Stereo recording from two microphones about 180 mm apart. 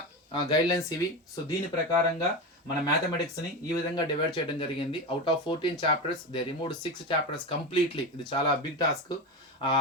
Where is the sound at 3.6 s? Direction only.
25° left (ahead or behind).